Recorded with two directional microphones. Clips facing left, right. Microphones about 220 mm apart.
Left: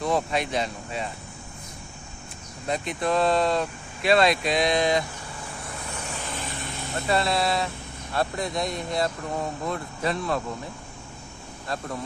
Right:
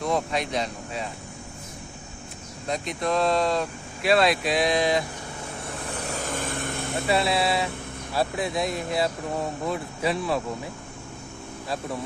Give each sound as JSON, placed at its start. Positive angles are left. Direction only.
{"t": 0.0, "sound": "speech", "side_deg": 0}
{"t": 2.6, "sound": "speech", "side_deg": 5}
{"t": 5.6, "sound": "vehicle", "side_deg": -40}
{"t": 7.1, "sound": "speech", "side_deg": -5}